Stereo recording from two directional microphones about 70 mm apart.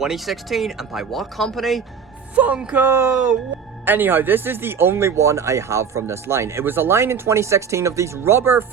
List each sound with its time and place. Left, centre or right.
0.0 s speech: centre
2.3 s speech: centre
2.8 s speech: right